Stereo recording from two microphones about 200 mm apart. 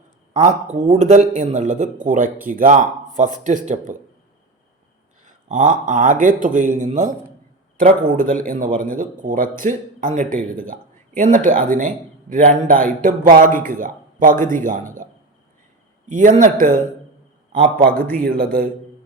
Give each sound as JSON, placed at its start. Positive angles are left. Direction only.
{"t": 0.3, "sound": "a man's voice", "side_deg": -35}
{"t": 5.2, "sound": "a man's voice", "side_deg": -40}
{"t": 16.0, "sound": "a man's voice", "side_deg": -40}